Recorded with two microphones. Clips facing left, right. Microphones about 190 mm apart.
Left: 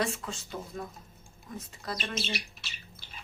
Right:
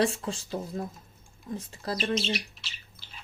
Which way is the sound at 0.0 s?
30° right (ahead or behind).